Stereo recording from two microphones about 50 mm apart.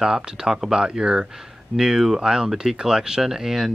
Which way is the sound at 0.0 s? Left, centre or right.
Centre.